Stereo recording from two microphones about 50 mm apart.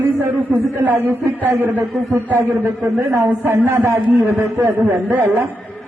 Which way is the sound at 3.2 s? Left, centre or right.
Right.